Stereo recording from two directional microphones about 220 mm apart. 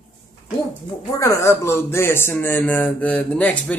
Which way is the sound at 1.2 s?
15° left (ahead or behind).